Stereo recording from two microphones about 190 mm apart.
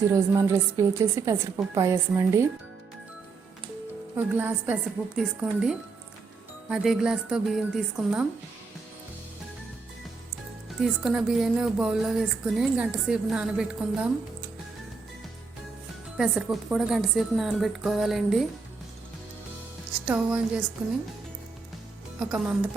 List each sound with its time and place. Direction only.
0.1 s a woman's voice: 15° right (ahead or behind)
4.2 s a woman's voice: 10° right (ahead or behind)
10.8 s speech: 5° right (ahead or behind)
16.1 s speech: centre (ahead or behind)
20.1 s a woman's voice: 5° right (ahead or behind)
22.2 s a woman's voice: 5° right (ahead or behind)